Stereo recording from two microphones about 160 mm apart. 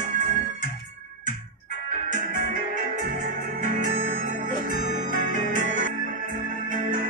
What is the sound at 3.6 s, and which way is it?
Music, 50° right (ahead or behind).